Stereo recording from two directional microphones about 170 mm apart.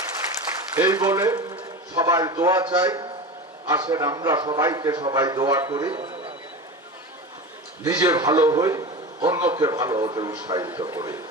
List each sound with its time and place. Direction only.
0.8 s a man's voice: 20° right (ahead or behind)
7.9 s a man's voice: 20° right (ahead or behind)